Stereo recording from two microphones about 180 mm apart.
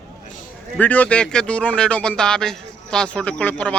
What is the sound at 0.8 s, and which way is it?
A man's voice, 10° left (ahead or behind).